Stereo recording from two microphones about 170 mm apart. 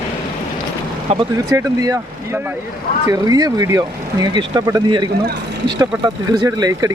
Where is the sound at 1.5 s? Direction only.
20° right (ahead or behind).